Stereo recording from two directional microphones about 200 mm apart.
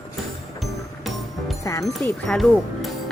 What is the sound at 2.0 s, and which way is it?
Speech, centre (ahead or behind).